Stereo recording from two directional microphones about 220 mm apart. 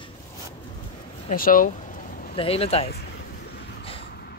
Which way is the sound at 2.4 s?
25° left (ahead or behind).